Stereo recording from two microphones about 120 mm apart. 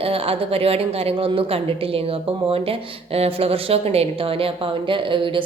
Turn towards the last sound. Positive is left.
turn(degrees=-45)  # may be behind; listen again after turning